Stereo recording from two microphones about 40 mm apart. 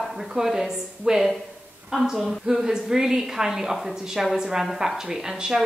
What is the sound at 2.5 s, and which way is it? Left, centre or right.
A woman's voice, centre.